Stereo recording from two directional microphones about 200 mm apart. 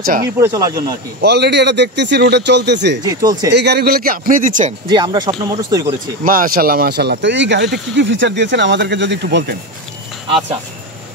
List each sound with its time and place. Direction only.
0.0 s a man's voice: 45° right (ahead or behind)
0.4 s speech: 15° right (ahead or behind)
1.2 s speech: 55° right (ahead or behind)
3.0 s speech: 20° right (ahead or behind)
3.4 s a man's voice: 55° right (ahead or behind); by 4.7 s 40° right (ahead or behind)
4.9 s speech: 20° right (ahead or behind)
6.2 s speech: 45° right (ahead or behind); by 9.6 s 60° right (ahead or behind)